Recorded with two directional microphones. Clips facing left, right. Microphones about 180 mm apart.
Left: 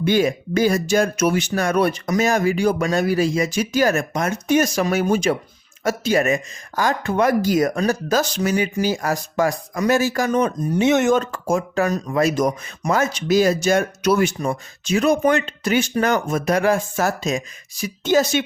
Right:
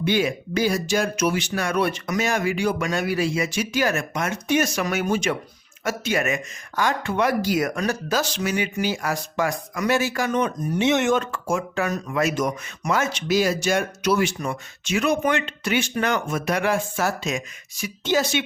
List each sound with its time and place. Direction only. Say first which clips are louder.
0.0 s speech: left 4 dB; 45° left (ahead or behind)